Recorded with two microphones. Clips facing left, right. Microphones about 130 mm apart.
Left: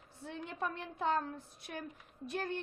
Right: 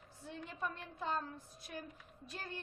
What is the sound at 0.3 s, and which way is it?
A woman's voice, 65° left (ahead or behind).